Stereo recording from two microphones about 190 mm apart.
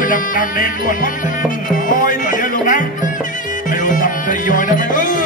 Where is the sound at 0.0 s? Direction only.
45° left (ahead or behind).